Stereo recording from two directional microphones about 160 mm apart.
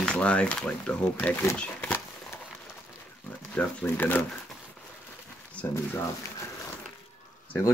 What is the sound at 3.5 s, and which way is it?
Speech, 10° left (ahead or behind).